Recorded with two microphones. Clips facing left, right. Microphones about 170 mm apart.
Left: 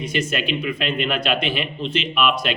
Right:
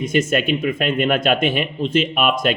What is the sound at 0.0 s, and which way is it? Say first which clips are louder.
A man's voice: right 6 dB; 45° right (ahead or behind).